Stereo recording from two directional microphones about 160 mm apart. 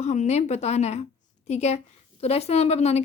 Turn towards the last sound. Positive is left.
turn(degrees=40)  # may be behind; listen again after turning